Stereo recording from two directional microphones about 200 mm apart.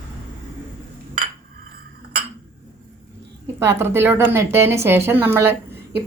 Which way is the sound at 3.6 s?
10° right (ahead or behind).